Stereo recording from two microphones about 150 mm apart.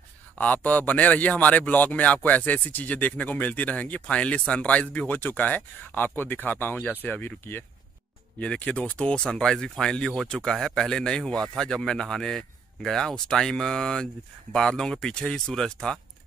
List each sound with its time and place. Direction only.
0.4 s speech: 10° left (ahead or behind)